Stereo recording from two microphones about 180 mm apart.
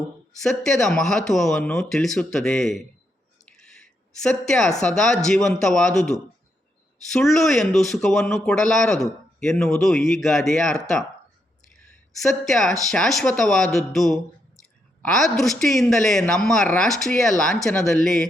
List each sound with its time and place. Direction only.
0.4 s speech: centre (ahead or behind)
3.5 s a sound: 5° left (ahead or behind)
4.8 s speech: 5° left (ahead or behind)
7.1 s speech: centre (ahead or behind)
12.2 s speech: centre (ahead or behind)